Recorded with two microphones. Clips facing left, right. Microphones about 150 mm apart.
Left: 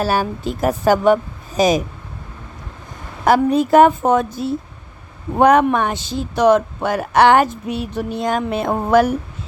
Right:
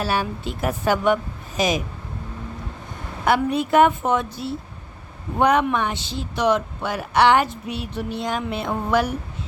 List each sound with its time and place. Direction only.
0.0 s a woman's voice: 40° left (ahead or behind)
3.2 s a woman's voice: 40° left (ahead or behind)